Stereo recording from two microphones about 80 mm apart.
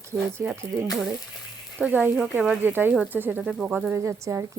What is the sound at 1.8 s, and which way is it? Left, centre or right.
Speech, centre.